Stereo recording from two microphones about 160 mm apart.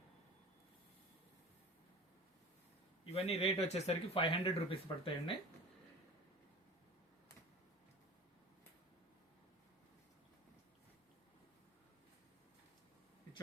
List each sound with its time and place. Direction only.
3.2 s speech: 40° left (ahead or behind)